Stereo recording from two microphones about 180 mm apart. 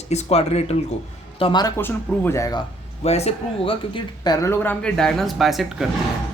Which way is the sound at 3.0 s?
35° left (ahead or behind).